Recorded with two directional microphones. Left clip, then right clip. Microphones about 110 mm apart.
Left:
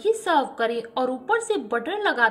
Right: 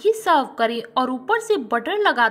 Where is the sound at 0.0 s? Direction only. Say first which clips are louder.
Right 3 dB; 40° right (ahead or behind).